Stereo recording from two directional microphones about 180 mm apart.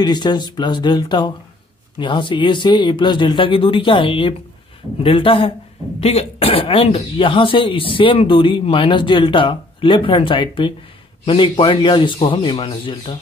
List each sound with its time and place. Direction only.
0.0 s speech: 25° left (ahead or behind)